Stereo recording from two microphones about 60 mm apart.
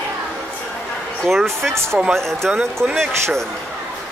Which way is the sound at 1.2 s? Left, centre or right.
Centre.